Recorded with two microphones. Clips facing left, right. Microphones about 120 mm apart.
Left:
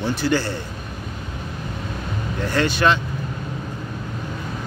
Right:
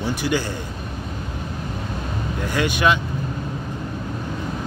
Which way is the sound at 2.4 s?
15° right (ahead or behind).